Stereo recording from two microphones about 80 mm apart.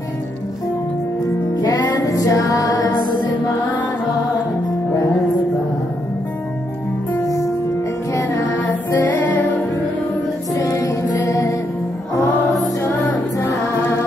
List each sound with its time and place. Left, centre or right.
1.6 s music: left
7.2 s music: left
8.9 s music: left
10.5 s music: left
12.8 s music: left